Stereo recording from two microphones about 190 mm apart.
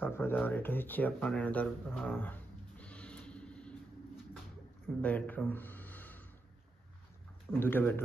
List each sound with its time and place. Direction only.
0.0 s speech: 10° left (ahead or behind)
4.8 s a sound: 10° left (ahead or behind)
7.5 s speech: 10° left (ahead or behind)